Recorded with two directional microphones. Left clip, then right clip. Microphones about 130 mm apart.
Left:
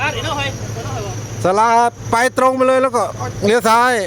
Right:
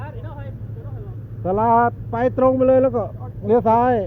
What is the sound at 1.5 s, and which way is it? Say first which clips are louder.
Speech: left 4 dB; 85° left.